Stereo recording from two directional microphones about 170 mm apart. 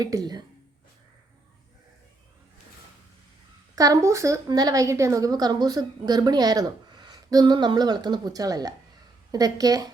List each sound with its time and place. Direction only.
0.0 s a woman's voice: 20° right (ahead or behind)
3.8 s a woman's voice: 20° right (ahead or behind)